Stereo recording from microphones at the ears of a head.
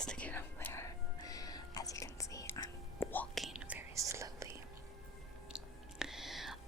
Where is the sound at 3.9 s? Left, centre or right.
Right.